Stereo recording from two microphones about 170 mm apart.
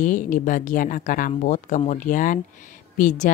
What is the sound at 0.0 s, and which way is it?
A woman's voice, 50° left (ahead or behind).